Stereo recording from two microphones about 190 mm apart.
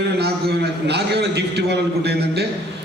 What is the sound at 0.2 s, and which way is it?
A man's voice, 60° right (ahead or behind).